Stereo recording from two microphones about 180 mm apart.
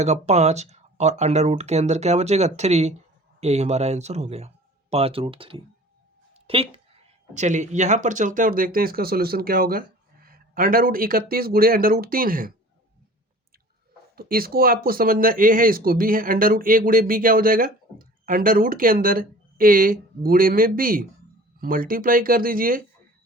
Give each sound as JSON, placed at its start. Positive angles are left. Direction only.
{"t": 0.0, "sound": "speech", "side_deg": -40}
{"t": 6.3, "sound": "a sound", "side_deg": -30}
{"t": 7.3, "sound": "speech", "side_deg": -40}
{"t": 14.2, "sound": "speech", "side_deg": -55}